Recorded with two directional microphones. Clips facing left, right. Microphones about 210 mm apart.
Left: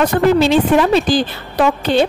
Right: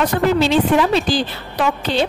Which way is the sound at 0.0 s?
50° left (ahead or behind).